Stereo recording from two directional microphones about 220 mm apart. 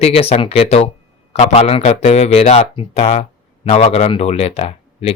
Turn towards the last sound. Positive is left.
turn(degrees=25)  # may be behind; listen again after turning